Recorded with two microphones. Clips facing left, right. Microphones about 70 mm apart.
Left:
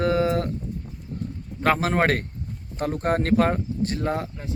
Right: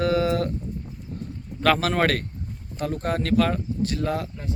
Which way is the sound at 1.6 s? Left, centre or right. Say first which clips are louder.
Even; left.